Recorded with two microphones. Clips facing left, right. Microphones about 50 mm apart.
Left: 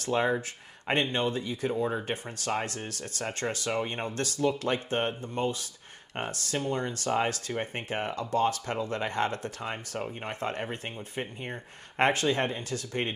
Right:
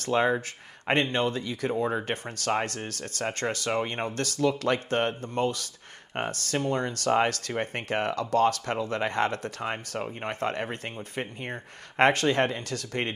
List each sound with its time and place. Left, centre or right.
0.0 s speech: right
1.7 s speech: right
2.0 s speech: right
4.4 s speech: right
6.1 s speech: right